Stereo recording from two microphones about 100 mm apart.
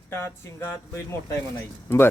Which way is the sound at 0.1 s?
25° left (ahead or behind).